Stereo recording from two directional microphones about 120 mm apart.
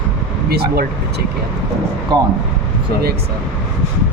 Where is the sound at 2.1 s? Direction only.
35° right (ahead or behind).